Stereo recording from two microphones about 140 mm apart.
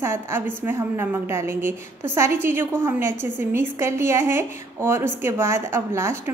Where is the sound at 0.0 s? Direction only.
15° right (ahead or behind).